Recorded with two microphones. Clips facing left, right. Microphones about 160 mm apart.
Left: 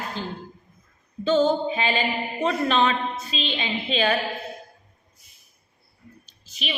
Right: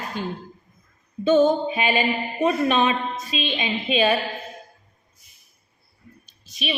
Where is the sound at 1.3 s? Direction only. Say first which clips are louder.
Right 3 dB; 20° right (ahead or behind).